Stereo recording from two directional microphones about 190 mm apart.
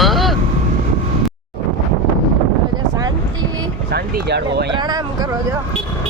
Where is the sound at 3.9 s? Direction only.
60° right (ahead or behind).